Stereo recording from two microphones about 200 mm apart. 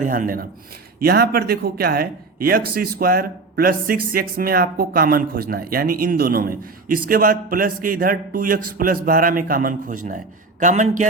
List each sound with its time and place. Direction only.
0.0 s a man's voice: 40° right (ahead or behind)